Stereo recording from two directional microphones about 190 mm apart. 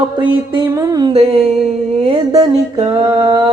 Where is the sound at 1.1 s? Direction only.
30° right (ahead or behind).